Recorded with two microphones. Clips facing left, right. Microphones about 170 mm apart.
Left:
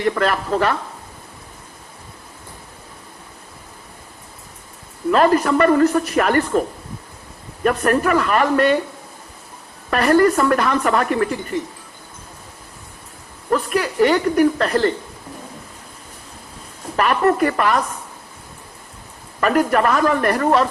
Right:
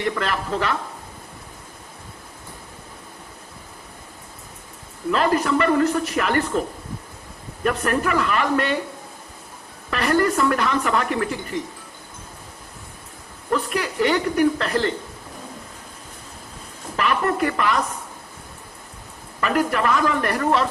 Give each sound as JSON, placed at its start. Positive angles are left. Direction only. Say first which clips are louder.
{"t": 0.0, "sound": "speech", "louder": "left 5 dB", "side_deg": 50}
{"t": 5.1, "sound": "speech", "louder": "left 5 dB", "side_deg": 50}
{"t": 9.9, "sound": "speech", "louder": "left 5 dB", "side_deg": 50}
{"t": 13.5, "sound": "speech", "louder": "left 4 dB", "side_deg": 50}
{"t": 17.0, "sound": "speech", "louder": "left 5 dB", "side_deg": 50}
{"t": 19.4, "sound": "speech", "louder": "left 5 dB", "side_deg": 50}